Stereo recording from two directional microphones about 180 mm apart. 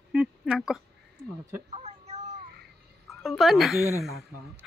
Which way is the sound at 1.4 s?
35° right (ahead or behind).